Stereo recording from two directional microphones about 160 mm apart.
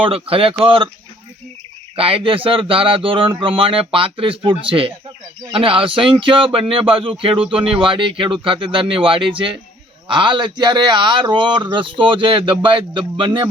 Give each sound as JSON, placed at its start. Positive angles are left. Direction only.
{"t": 0.0, "sound": "speech", "side_deg": -35}
{"t": 2.0, "sound": "speech", "side_deg": -35}